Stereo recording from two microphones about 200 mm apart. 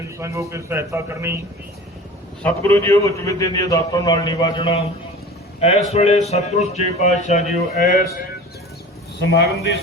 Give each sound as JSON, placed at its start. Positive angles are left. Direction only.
{"t": 0.2, "sound": "a man's voice", "side_deg": -15}
{"t": 2.4, "sound": "a man's voice", "side_deg": 10}
{"t": 9.2, "sound": "a man's voice", "side_deg": 55}